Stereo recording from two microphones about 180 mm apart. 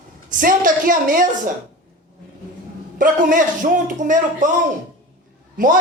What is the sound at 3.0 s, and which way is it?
Speech, 45° right (ahead or behind).